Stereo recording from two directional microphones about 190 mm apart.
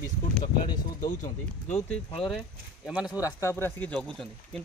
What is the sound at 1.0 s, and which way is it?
Speech, 40° left (ahead or behind).